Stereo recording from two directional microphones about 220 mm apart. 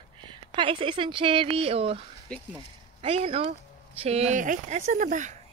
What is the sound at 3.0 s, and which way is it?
Speech, 25° right (ahead or behind).